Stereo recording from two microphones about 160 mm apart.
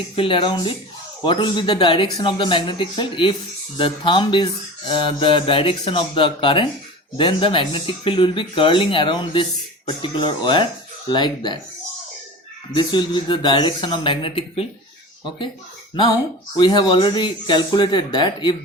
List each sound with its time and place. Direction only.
0.2 s speech: 35° left (ahead or behind)
12.7 s speech: 30° left (ahead or behind)
16.6 s speech: 30° left (ahead or behind)